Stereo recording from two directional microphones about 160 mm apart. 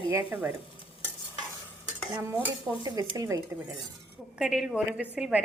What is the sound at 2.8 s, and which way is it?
Speech, 25° right (ahead or behind).